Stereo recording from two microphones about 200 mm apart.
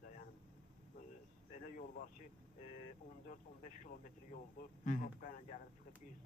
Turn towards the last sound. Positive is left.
turn(degrees=45)  # may be behind; listen again after turning